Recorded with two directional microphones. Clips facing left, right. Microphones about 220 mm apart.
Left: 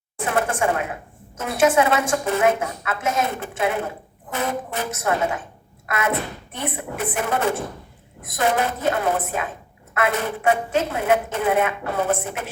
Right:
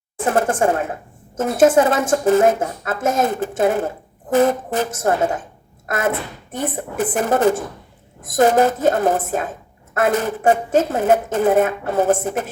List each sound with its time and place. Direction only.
0.3 s a woman's voice: 45° right (ahead or behind)